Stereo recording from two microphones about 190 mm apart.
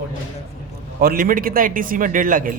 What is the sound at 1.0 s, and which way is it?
Speech, 50° right (ahead or behind).